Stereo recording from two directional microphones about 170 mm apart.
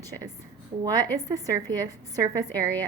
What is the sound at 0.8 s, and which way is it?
Speech, 20° right (ahead or behind).